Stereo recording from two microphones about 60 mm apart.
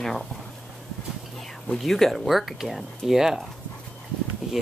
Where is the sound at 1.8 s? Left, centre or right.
Centre.